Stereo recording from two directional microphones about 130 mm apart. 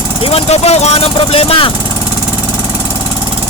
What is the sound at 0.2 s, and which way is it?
Speech, 45° left (ahead or behind).